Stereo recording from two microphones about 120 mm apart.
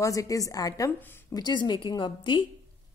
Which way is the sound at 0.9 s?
15° left (ahead or behind).